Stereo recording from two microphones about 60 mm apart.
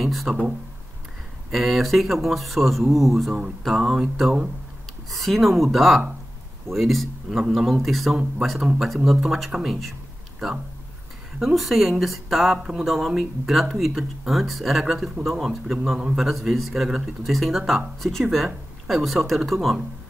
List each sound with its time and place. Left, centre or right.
0.0 s speech: centre
1.5 s speech: centre
5.1 s speech: centre
11.4 s speech: centre